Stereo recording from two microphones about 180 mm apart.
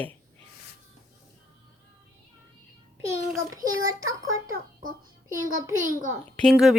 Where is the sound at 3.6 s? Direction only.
20° right (ahead or behind).